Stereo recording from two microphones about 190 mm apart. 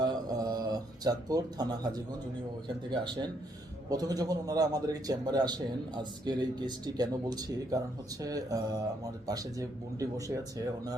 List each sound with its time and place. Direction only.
0.0 s mantra: 20° right (ahead or behind)
2.6 s a man's voice: 25° right (ahead or behind)